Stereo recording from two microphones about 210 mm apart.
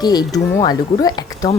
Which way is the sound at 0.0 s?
20° left (ahead or behind).